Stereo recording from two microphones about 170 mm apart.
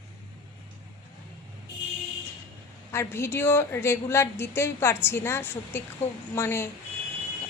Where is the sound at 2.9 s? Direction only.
15° left (ahead or behind).